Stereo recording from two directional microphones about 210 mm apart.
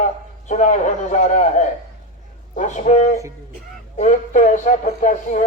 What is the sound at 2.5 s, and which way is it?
Speech, 35° left (ahead or behind).